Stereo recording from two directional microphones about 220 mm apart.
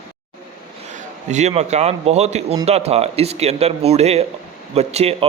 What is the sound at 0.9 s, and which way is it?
A man's voice, 30° right (ahead or behind).